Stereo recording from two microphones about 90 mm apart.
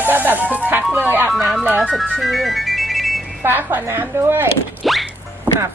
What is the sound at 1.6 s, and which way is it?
Speech, 15° right (ahead or behind).